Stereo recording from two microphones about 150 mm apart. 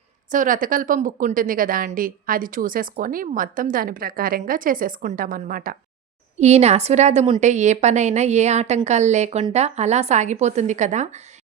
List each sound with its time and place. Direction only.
0.3 s a woman's voice: 60° right (ahead or behind)
6.4 s a woman's voice: 45° right (ahead or behind)